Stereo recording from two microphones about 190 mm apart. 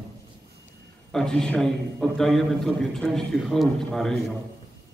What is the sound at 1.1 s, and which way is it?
A man's voice, 5° left (ahead or behind).